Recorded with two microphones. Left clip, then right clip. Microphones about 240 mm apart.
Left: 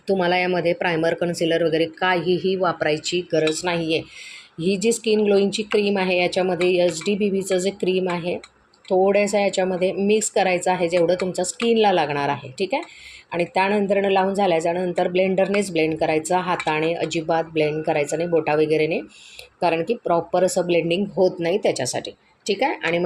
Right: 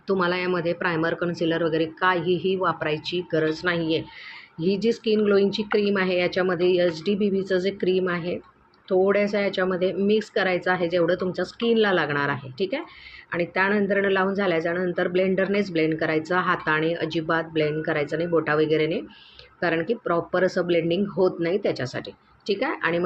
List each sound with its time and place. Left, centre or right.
0.1 s speech: centre